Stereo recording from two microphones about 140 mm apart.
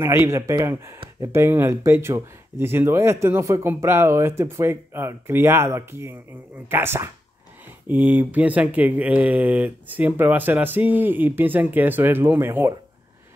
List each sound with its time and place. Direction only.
0.0 s a man's voice: 20° right (ahead or behind)